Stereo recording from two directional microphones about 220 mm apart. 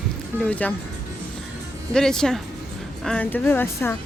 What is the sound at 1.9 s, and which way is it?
A woman's voice, 5° left (ahead or behind).